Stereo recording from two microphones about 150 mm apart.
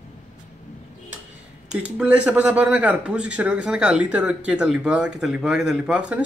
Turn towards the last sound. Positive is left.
turn(degrees=-5)  # may be behind; listen again after turning